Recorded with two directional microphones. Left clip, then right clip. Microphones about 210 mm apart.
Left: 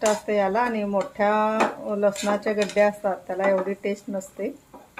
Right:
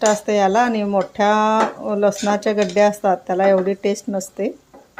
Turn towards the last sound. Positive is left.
turn(degrees=-50)  # may be behind; listen again after turning